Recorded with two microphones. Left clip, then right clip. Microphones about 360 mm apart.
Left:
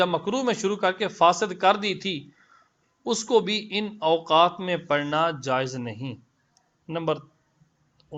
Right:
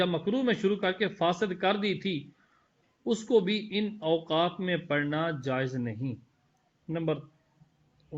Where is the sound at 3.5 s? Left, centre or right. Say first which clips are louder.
Left 4 dB; left.